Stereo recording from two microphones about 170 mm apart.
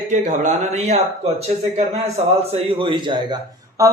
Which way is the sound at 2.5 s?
30° right (ahead or behind).